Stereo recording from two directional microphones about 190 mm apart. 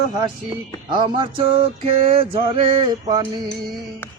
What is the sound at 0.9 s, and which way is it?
Music, 25° right (ahead or behind).